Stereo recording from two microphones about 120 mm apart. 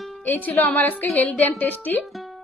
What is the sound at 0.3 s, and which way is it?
A woman's voice, 15° left (ahead or behind).